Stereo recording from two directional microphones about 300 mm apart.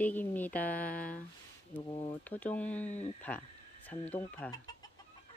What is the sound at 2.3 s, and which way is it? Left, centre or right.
Speech, centre.